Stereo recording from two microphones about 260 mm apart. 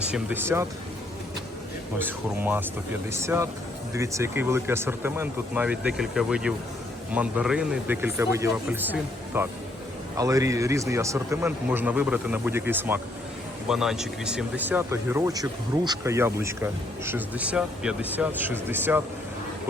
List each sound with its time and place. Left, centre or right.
0.1 s speech: centre
2.0 s speech: centre